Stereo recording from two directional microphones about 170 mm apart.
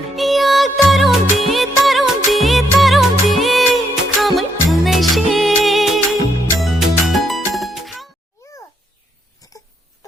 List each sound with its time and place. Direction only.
0.2 s music of bollywood: centre (ahead or behind)
9.4 s crying: 20° left (ahead or behind)